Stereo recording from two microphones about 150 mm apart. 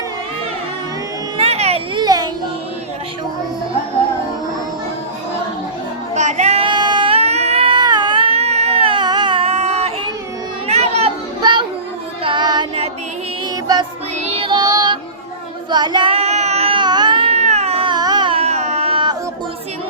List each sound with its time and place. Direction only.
1.4 s a sound: 45° right (ahead or behind)
2.0 s music: 25° right (ahead or behind)
6.1 s child singing: 50° right (ahead or behind)
10.7 s children playing: 45° right (ahead or behind)
11.3 s child singing: 30° right (ahead or behind)
12.2 s music: 30° right (ahead or behind)
14.2 s child singing: 45° right (ahead or behind)